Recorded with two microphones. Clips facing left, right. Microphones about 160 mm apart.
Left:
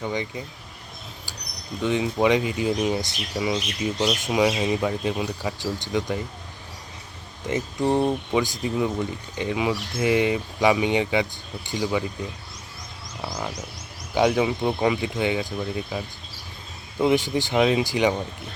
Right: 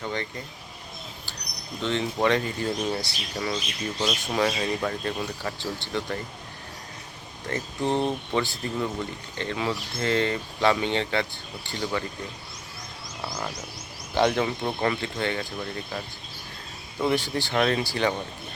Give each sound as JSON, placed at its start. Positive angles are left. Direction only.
{"t": 0.0, "sound": "speech", "side_deg": 15}
{"t": 1.8, "sound": "speech", "side_deg": 10}
{"t": 7.4, "sound": "speech", "side_deg": 15}
{"t": 13.2, "sound": "frog", "side_deg": 10}
{"t": 14.2, "sound": "speech", "side_deg": 10}